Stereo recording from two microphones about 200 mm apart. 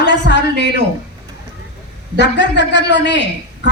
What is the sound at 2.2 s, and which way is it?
A man's voice, 60° left (ahead or behind).